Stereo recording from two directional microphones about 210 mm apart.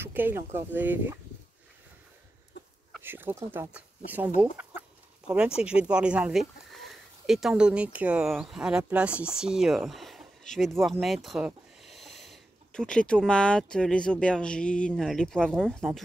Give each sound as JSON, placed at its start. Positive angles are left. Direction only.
{"t": 0.0, "sound": "speech", "side_deg": -10}
{"t": 2.6, "sound": "a sound", "side_deg": 55}
{"t": 3.0, "sound": "speech", "side_deg": -10}
{"t": 5.6, "sound": "speech", "side_deg": -5}